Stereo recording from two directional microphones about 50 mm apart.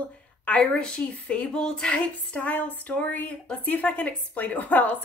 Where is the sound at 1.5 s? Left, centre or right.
Centre; by 2.7 s left.